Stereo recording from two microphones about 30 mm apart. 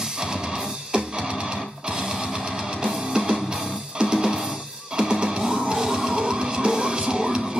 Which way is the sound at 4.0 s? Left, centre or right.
Right.